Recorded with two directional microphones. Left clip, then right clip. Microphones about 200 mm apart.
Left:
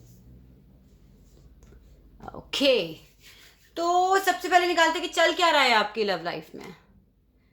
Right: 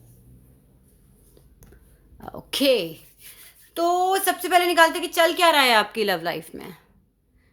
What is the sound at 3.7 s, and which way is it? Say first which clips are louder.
Speech: right 1 dB; 35° right (ahead or behind).